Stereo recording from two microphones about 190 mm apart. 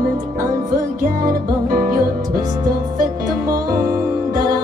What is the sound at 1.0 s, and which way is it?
Music, 50° right (ahead or behind).